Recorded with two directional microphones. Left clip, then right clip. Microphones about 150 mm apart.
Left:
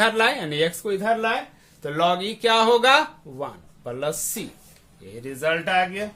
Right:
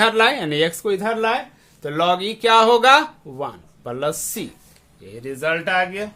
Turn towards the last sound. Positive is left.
turn(degrees=-30)  # may be behind; listen again after turning